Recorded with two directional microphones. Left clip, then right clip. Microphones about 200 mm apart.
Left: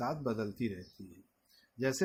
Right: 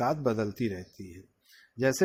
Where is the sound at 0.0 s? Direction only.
40° right (ahead or behind).